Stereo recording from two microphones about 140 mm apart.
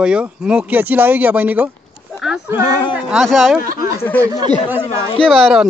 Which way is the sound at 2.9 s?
5° right (ahead or behind).